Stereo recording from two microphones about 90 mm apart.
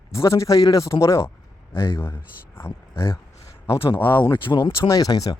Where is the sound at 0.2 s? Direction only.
35° left (ahead or behind).